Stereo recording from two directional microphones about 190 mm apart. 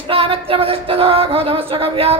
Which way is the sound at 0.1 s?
30° right (ahead or behind).